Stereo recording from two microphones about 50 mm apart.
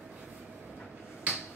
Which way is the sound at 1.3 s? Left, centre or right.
Right.